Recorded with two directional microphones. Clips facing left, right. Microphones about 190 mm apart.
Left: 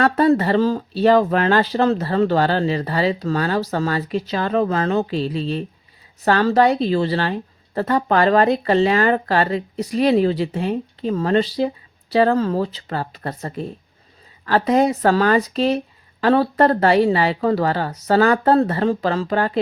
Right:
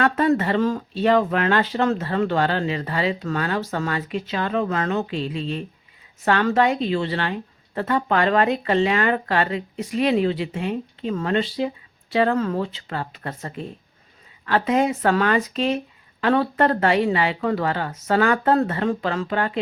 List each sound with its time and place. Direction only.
0.0 s speech: 35° left (ahead or behind)